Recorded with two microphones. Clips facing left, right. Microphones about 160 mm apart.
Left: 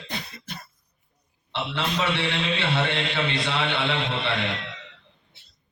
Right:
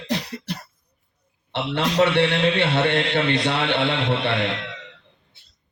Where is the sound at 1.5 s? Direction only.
60° right (ahead or behind).